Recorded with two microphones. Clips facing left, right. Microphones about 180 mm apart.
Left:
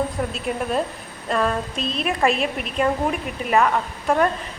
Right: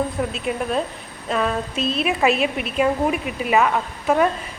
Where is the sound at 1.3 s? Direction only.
Centre (ahead or behind).